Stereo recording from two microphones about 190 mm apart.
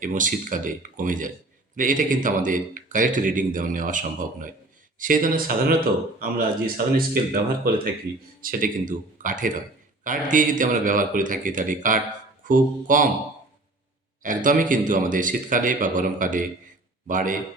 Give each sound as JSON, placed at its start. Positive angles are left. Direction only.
{"t": 0.0, "sound": "speech", "side_deg": -45}
{"t": 8.4, "sound": "speech", "side_deg": -45}
{"t": 14.2, "sound": "speech", "side_deg": -45}